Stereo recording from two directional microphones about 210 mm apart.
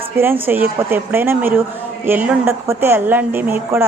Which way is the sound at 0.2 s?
10° right (ahead or behind).